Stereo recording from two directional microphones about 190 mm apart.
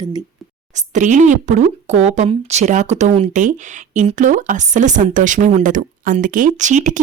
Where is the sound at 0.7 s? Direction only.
40° right (ahead or behind).